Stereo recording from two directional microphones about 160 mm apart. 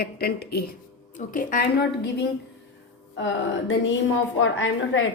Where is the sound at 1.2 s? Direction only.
55° left (ahead or behind); by 2.3 s 90° left.